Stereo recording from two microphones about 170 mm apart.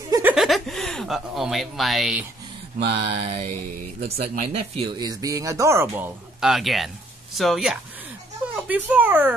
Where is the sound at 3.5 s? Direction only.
55° right (ahead or behind).